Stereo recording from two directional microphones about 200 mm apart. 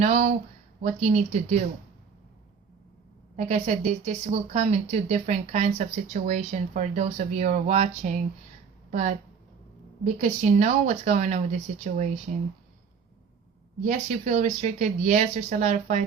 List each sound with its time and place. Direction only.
0.0 s a woman's voice: 35° right (ahead or behind)
3.3 s a woman's voice: 35° right (ahead or behind)
13.8 s a woman's voice: 35° right (ahead or behind)